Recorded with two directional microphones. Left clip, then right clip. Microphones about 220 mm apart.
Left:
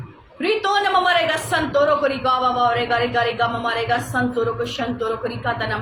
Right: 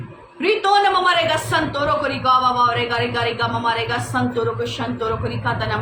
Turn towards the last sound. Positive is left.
turn(degrees=-10)  # may be behind; listen again after turning